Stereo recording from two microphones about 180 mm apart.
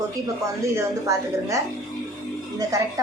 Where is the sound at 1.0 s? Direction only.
15° right (ahead or behind).